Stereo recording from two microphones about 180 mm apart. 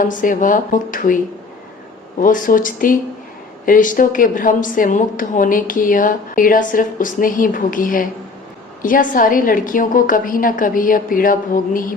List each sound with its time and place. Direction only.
0.0 s a woman's voice: 45° left (ahead or behind)
2.2 s a woman's voice: 50° left (ahead or behind)